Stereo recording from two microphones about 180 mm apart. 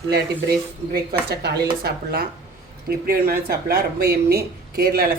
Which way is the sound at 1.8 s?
60° right (ahead or behind).